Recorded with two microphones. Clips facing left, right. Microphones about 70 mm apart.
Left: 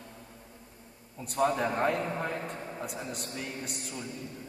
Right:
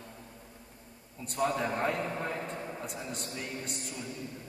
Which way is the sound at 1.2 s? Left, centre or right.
Centre.